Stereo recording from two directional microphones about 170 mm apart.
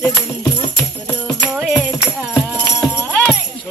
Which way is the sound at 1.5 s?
5° right (ahead or behind).